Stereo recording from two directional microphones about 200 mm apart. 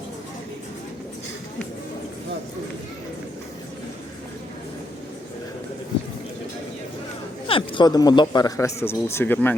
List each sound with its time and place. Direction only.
7.4 s speech: 25° left (ahead or behind); by 9.6 s 10° left (ahead or behind)